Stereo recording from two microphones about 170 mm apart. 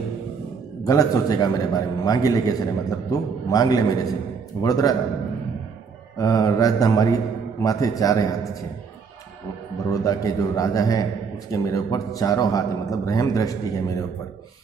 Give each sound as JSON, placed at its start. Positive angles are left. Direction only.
{"t": 0.8, "sound": "a man's voice", "side_deg": 20}
{"t": 6.1, "sound": "a man's voice", "side_deg": 20}
{"t": 9.8, "sound": "a man's voice", "side_deg": 20}